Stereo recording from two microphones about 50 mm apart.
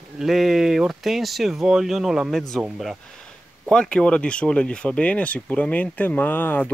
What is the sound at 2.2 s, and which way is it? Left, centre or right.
Speech, centre.